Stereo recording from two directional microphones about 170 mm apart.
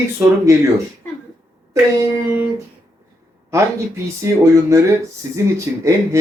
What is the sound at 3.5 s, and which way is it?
Speech, 15° right (ahead or behind).